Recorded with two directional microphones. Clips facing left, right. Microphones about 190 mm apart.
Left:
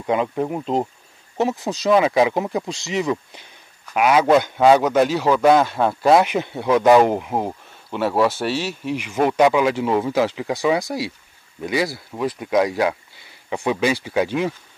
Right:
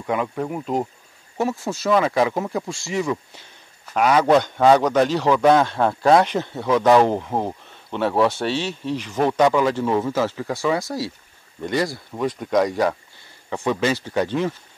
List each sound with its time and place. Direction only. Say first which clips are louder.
0.0 s a man's voice: left 3 dB; 20° left (ahead or behind)
3.9 s a man's voice: left 1 dB; 10° left (ahead or behind)